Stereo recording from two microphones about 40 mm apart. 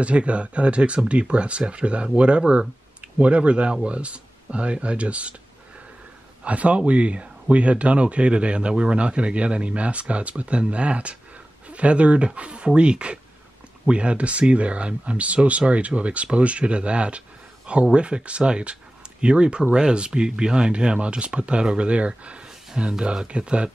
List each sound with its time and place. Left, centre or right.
0.0 s a man's voice: right
6.4 s a man's voice: right